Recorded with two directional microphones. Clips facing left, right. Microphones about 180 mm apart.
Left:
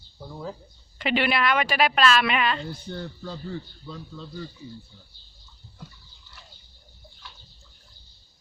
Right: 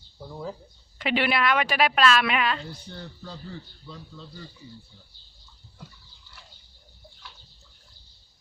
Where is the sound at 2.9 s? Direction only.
50° left (ahead or behind).